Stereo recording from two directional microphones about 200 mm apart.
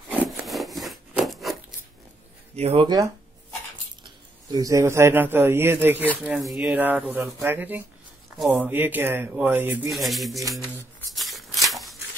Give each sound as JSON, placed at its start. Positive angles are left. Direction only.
{"t": 0.1, "sound": "wood", "side_deg": -5}
{"t": 2.5, "sound": "speech", "side_deg": -30}
{"t": 4.5, "sound": "speech", "side_deg": -15}
{"t": 11.0, "sound": "a sound", "side_deg": 0}